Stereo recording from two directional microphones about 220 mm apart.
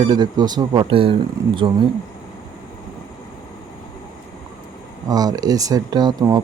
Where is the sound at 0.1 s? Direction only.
20° right (ahead or behind).